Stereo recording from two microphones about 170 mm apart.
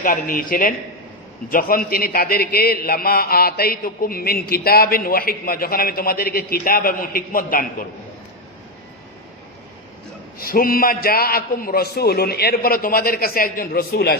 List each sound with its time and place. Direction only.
0.0 s a man's voice: 55° left (ahead or behind)
10.3 s a man's voice: 60° left (ahead or behind)